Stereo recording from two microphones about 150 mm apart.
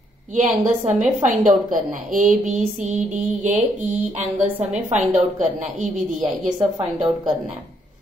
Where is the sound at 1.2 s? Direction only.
60° right (ahead or behind).